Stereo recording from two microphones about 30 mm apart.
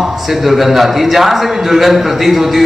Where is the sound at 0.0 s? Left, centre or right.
Centre.